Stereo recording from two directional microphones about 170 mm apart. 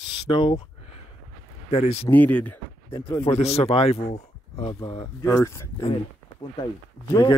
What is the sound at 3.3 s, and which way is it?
Speech, 35° left (ahead or behind).